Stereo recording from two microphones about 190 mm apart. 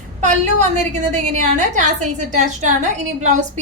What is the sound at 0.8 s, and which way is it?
A woman's voice, 40° right (ahead or behind).